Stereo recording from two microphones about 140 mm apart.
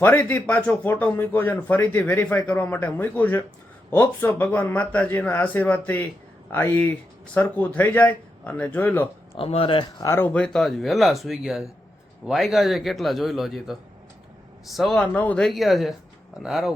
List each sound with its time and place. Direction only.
0.0 s speech: 10° left (ahead or behind)
9.3 s speech: 45° left (ahead or behind)
10.1 s speech: 15° left (ahead or behind); by 16.7 s centre (ahead or behind)